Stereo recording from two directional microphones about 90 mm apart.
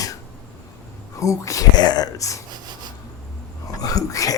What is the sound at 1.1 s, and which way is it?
Speech, 35° left (ahead or behind).